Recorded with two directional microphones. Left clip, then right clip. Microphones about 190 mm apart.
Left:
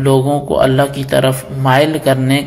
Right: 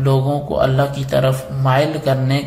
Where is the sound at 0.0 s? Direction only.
20° left (ahead or behind).